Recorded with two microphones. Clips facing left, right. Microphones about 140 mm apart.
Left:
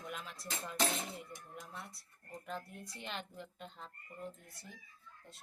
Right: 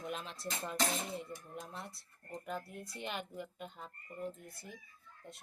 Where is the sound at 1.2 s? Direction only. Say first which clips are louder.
Right 4 dB; 25° right (ahead or behind).